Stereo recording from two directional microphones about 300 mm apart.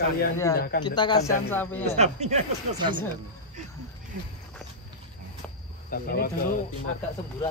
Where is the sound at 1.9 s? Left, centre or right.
Right.